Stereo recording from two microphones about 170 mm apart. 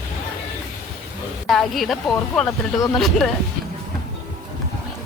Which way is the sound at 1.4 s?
Centre (ahead or behind).